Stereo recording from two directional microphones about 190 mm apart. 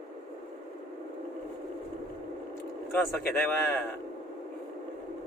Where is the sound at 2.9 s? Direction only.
10° left (ahead or behind).